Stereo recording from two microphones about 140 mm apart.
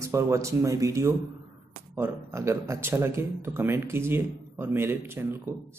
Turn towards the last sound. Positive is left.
turn(degrees=-15)  # may be behind; listen again after turning